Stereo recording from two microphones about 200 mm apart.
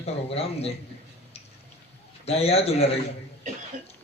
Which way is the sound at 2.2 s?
30° left (ahead or behind).